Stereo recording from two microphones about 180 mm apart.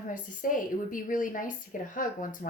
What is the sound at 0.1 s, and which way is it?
Speech, 50° left (ahead or behind).